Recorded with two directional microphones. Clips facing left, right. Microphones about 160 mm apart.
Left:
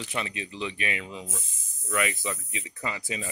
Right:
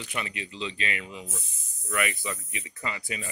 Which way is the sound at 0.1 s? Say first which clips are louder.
Left 1 dB; 20° left (ahead or behind).